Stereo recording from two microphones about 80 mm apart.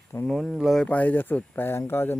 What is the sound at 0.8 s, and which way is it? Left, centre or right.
Speech, centre.